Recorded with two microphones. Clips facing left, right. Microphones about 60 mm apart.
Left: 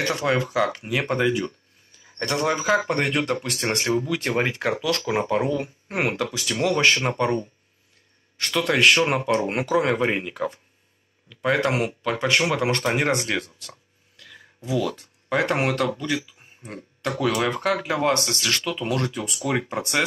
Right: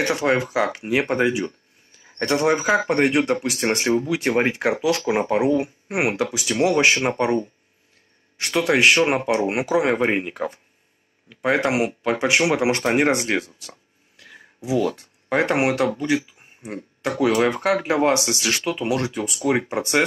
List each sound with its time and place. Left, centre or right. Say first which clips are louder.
0.0 s speech: right 3 dB; right
13.3 s speech: right 3 dB; centre
14.1 s a sound: right 2 dB; right
15.4 s speech: right 4 dB; centre
18.8 s speech: right 3 dB; centre
19.4 s speech: right 4 dB; centre
19.8 s speech: right 4 dB; centre